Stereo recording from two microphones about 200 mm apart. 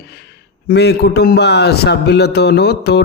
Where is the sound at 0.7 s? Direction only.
55° left (ahead or behind).